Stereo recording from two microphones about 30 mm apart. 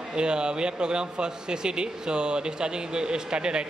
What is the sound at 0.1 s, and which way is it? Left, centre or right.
A man's voice, right.